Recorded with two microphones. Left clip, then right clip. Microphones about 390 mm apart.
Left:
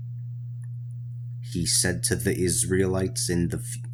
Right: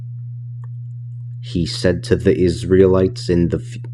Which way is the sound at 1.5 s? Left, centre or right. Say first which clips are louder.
Right 8 dB; left.